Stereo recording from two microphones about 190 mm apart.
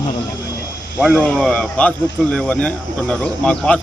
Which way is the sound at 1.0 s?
Centre (ahead or behind).